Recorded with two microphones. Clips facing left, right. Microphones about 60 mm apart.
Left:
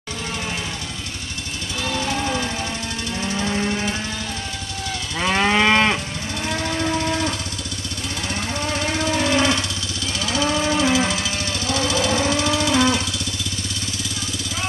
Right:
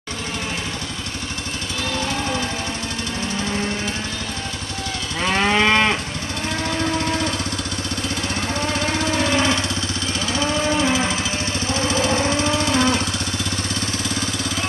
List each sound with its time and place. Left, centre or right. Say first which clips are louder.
1.9 s music: left 1 dB; centre
3.3 s a sound: left 2 dB; centre
5.2 s moo: even; centre
8.7 s jackhammer: left 1 dB; right
10.2 s cattle: left 2 dB; right
10.7 s music: even; right
11.6 s lawn mower: even; right